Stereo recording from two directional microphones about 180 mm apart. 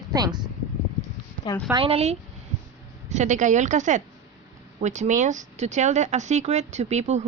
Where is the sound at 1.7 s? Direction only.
30° right (ahead or behind).